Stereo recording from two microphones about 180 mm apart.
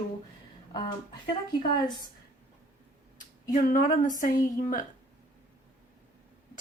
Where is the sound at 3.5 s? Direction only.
45° left (ahead or behind).